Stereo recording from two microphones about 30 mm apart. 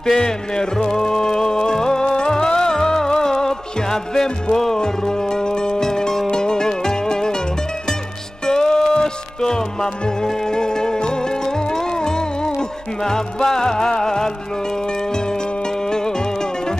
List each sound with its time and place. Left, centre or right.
0.0 s music: left
8.5 s music: left
15.9 s music: left